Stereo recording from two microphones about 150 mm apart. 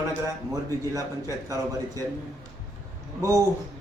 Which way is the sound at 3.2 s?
20° right (ahead or behind).